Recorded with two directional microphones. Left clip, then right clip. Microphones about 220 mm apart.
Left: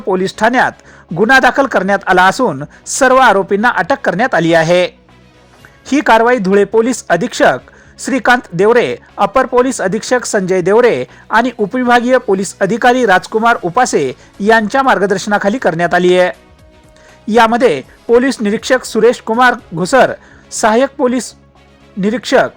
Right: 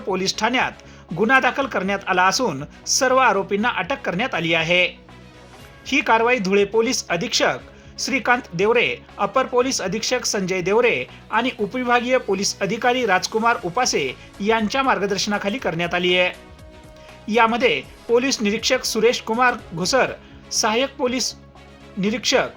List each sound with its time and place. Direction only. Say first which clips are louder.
0.1 s a man's voice: left 9 dB; 30° left (ahead or behind)
1.1 s speech: left 8 dB; 25° left (ahead or behind)
1.4 s a man's voice: left 10 dB; 40° left (ahead or behind)
2.4 s speech: left 9 dB; 25° left (ahead or behind)
3.0 s a man's voice: left 9 dB; 40° left (ahead or behind)
9.3 s a man's voice: left 7 dB; 35° left (ahead or behind)
11.9 s a man's voice: left 8 dB; 40° left (ahead or behind)